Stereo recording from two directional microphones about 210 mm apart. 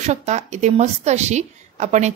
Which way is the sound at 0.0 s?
30° right (ahead or behind).